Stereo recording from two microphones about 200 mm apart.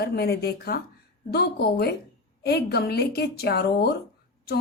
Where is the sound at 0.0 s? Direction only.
55° left (ahead or behind).